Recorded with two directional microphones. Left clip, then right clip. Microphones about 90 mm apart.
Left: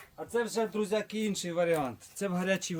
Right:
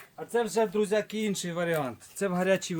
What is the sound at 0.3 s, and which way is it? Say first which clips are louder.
Speech: right 4 dB; 35° right (ahead or behind).